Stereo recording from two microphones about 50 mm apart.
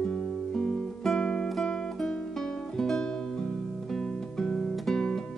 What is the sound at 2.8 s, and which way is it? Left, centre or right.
Music, centre.